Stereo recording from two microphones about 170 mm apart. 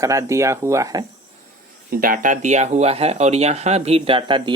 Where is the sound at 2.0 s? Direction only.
55° right (ahead or behind).